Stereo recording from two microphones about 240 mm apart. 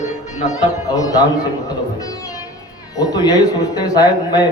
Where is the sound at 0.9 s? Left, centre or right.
Centre.